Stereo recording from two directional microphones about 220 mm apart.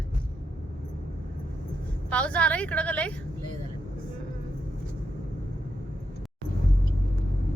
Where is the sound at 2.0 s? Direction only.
5° left (ahead or behind).